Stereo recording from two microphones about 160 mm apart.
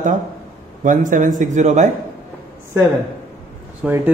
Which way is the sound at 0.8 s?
55° right (ahead or behind).